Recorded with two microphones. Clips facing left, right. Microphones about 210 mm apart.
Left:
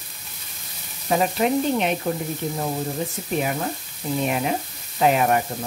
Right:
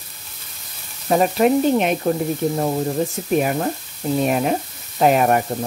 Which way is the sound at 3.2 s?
55° right (ahead or behind).